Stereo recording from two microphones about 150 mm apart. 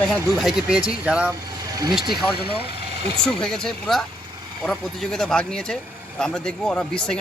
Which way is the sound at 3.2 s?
5° left (ahead or behind).